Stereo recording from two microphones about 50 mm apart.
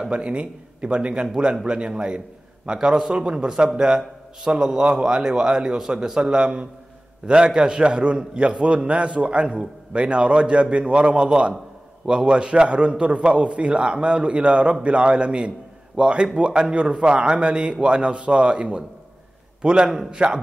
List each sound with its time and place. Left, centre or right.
0.0 s a man's voice: centre
8.2 s a man's voice: centre